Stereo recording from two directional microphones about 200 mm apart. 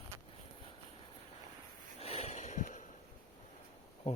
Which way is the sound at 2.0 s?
30° left (ahead or behind).